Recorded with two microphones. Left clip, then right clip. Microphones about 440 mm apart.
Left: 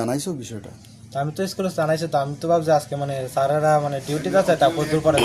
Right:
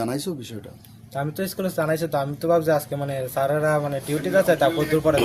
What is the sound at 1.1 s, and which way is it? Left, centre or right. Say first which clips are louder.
Speech: left 2 dB; right.